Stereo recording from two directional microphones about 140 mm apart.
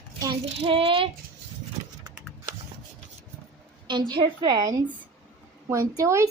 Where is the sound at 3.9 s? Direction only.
35° right (ahead or behind).